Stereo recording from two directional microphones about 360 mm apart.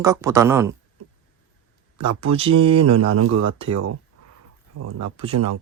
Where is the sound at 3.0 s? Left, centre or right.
Right.